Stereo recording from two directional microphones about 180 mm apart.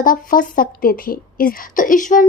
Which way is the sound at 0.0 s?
50° left (ahead or behind).